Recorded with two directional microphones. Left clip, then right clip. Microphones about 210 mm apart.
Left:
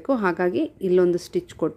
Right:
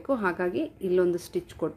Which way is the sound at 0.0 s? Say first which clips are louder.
Left 5 dB; 40° left (ahead or behind).